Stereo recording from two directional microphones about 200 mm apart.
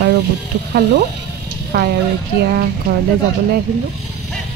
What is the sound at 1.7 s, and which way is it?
Speech, 50° right (ahead or behind).